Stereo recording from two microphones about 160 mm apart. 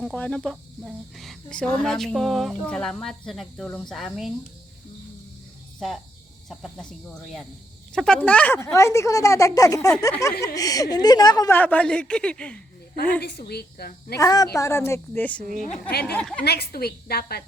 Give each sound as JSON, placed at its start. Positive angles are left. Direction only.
{"t": 0.0, "sound": "a sound", "side_deg": 5}
{"t": 6.5, "sound": "a sound", "side_deg": 0}
{"t": 7.9, "sound": "speech", "side_deg": 5}
{"t": 11.5, "sound": "a woman's voice", "side_deg": 10}
{"t": 13.5, "sound": "speech", "side_deg": 80}
{"t": 14.2, "sound": "a woman's voice", "side_deg": 25}
{"t": 15.9, "sound": "speech", "side_deg": 80}
{"t": 16.1, "sound": "a woman's voice", "side_deg": 5}
{"t": 16.4, "sound": "a woman's voice", "side_deg": 90}